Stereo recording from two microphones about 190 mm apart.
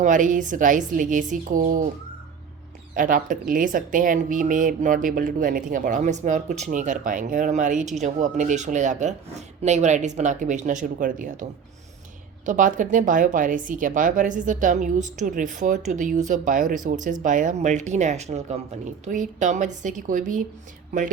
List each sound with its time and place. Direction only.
0.0 s a woman's voice: 40° right (ahead or behind)
2.9 s a woman's voice: 45° right (ahead or behind)
12.5 s a woman's voice: 45° right (ahead or behind)